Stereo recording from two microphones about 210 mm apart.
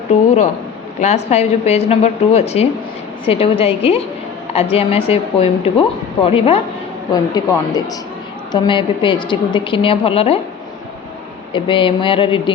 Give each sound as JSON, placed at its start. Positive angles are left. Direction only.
{"t": 0.1, "sound": "a woman's voice", "side_deg": 35}
{"t": 11.5, "sound": "a woman's voice", "side_deg": 25}